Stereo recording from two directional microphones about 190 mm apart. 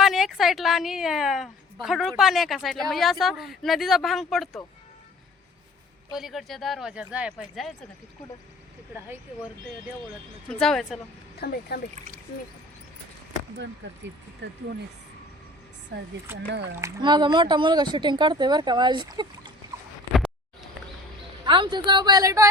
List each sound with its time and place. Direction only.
0.0 s a woman's voice: centre (ahead or behind)
6.1 s speech: centre (ahead or behind)
10.5 s speech: 5° left (ahead or behind)
11.3 s speech: 55° left (ahead or behind)
14.4 s speech: 70° right (ahead or behind)
16.3 s speech: 10° right (ahead or behind)
20.1 s a sound: centre (ahead or behind)
21.4 s speech: 25° right (ahead or behind)